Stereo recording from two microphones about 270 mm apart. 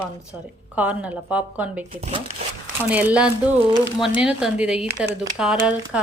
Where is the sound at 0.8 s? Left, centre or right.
Centre.